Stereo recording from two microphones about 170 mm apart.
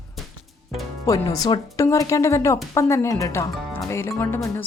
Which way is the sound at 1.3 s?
20° left (ahead or behind).